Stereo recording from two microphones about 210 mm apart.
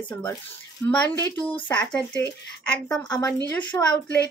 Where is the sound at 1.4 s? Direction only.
25° left (ahead or behind).